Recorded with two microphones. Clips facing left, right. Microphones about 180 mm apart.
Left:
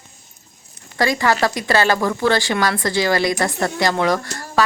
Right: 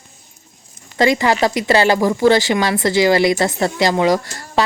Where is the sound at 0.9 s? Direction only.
20° right (ahead or behind).